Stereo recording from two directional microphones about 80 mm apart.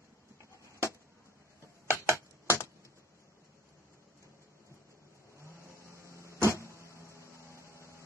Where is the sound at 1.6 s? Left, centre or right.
Right.